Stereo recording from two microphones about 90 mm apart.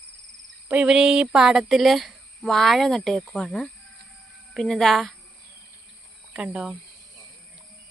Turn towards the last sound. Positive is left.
turn(degrees=-5)  # may be behind; listen again after turning